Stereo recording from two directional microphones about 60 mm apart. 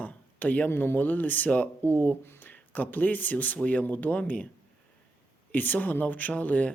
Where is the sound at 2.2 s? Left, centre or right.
Left.